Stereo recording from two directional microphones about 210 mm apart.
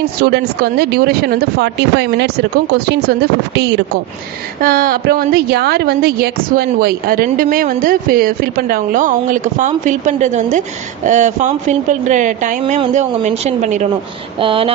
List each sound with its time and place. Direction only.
0.0 s a woman's voice: 50° right (ahead or behind)
4.6 s a woman's voice: 45° right (ahead or behind)
14.4 s a sound: 25° right (ahead or behind)